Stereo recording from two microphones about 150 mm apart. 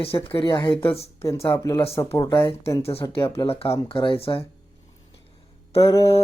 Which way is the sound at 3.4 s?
40° left (ahead or behind).